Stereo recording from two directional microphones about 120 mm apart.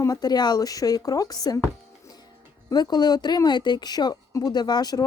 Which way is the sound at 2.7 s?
35° left (ahead or behind).